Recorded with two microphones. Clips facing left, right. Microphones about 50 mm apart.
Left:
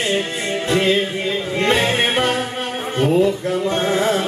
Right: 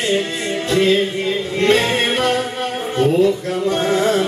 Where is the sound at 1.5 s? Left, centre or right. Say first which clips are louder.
Right 2 dB; left.